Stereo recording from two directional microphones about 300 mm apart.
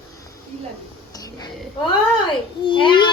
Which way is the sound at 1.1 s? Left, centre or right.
Centre.